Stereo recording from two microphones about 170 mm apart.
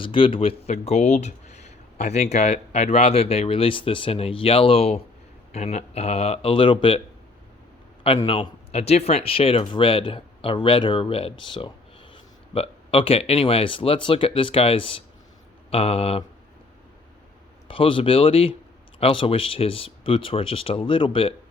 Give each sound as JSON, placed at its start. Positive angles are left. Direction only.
{"t": 0.0, "sound": "speech", "side_deg": 30}
{"t": 8.2, "sound": "speech", "side_deg": 30}
{"t": 17.7, "sound": "speech", "side_deg": 30}